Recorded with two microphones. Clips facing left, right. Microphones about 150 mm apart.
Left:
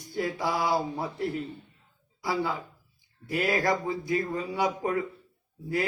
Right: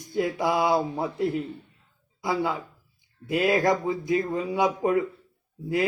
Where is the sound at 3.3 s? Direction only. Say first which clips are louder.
Right 4 dB; 20° right (ahead or behind).